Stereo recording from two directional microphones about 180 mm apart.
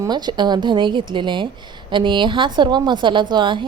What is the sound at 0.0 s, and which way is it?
A woman's voice, 25° right (ahead or behind).